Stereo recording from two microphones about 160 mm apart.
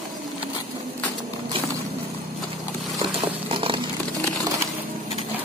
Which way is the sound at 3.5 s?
30° right (ahead or behind).